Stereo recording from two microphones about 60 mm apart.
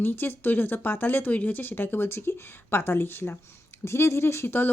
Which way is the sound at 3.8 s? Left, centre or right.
Left.